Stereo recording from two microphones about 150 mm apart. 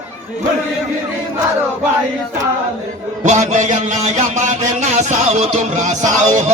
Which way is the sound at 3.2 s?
55° right (ahead or behind).